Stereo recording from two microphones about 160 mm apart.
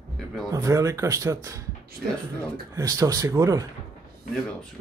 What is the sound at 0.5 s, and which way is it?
Speech, 20° right (ahead or behind).